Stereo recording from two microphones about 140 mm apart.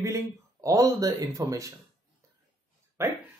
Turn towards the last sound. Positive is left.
turn(degrees=-20)  # may be behind; listen again after turning